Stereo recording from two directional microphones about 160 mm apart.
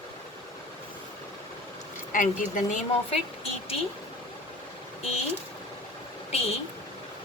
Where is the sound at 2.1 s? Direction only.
55° left (ahead or behind).